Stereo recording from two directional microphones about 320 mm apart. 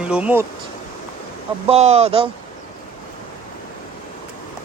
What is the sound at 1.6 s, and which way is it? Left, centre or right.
Speech, centre.